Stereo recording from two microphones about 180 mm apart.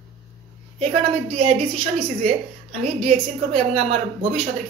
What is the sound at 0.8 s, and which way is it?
A woman's voice, 40° right (ahead or behind).